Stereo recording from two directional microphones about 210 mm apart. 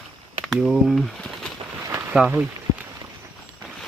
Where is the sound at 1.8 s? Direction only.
15° right (ahead or behind).